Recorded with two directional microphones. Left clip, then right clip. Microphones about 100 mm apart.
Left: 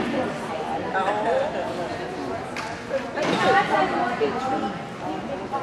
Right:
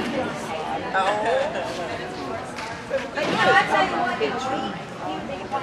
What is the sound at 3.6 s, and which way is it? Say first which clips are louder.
Chatter: right 1 dB; 10° right (ahead or behind).